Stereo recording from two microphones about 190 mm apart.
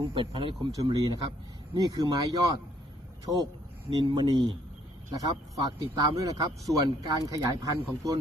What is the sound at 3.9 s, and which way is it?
A man's voice, 25° right (ahead or behind).